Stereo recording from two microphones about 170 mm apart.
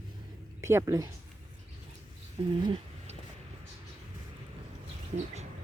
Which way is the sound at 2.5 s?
30° right (ahead or behind).